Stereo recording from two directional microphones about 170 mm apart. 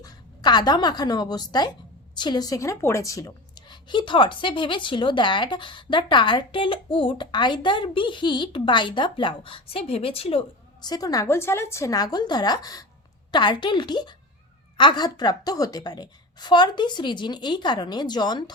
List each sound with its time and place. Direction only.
0.0 s a woman's voice: 25° left (ahead or behind)